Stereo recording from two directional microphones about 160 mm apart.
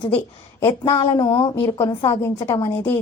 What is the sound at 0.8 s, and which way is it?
Speech, 25° left (ahead or behind).